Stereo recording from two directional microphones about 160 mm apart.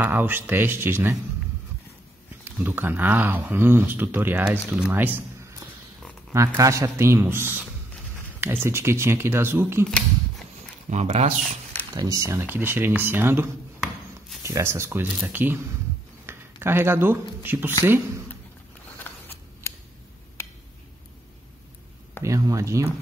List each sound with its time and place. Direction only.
0.0 s speech: 10° right (ahead or behind)
2.4 s speech: 10° right (ahead or behind)
6.3 s speech: 20° right (ahead or behind)
10.9 s speech: 45° right (ahead or behind)
11.9 s speech: 20° right (ahead or behind)
19.0 s scissors: 15° left (ahead or behind)
22.2 s speech: 20° right (ahead or behind)